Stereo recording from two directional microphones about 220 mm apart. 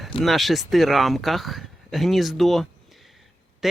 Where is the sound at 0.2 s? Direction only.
Centre (ahead or behind).